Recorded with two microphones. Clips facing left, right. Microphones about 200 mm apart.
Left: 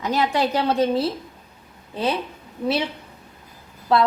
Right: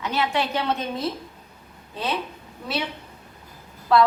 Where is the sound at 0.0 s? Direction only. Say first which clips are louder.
Left 4 dB; 40° left (ahead or behind).